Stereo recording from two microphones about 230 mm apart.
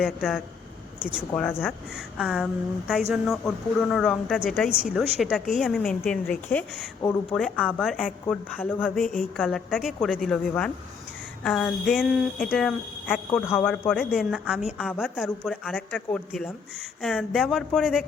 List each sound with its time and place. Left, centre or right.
0.0 s speech: centre
1.3 s speech: centre
1.6 s speech: centre
13.6 s speech: centre